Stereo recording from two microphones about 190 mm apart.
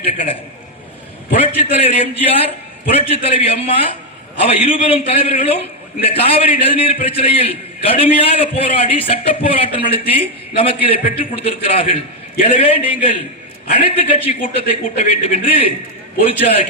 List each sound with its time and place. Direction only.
0.0 s a man's voice: 40° left (ahead or behind)
1.4 s a man's voice: 30° left (ahead or behind)